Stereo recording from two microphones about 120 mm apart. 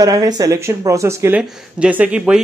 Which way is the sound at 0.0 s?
30° right (ahead or behind).